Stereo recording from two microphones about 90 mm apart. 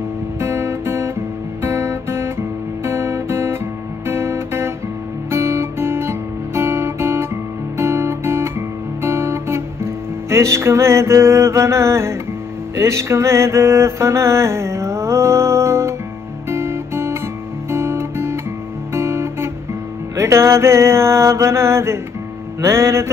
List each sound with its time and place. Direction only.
0.4 s guitar: 30° right (ahead or behind)
12.7 s mantra: 35° right (ahead or behind)
16.4 s guitar: 30° right (ahead or behind)
20.2 s mantra: 30° right (ahead or behind)
22.6 s music: 30° right (ahead or behind)